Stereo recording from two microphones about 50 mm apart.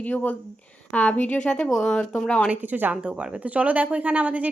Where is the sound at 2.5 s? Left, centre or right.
Right.